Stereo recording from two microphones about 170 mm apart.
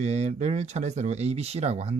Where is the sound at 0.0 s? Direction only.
40° right (ahead or behind).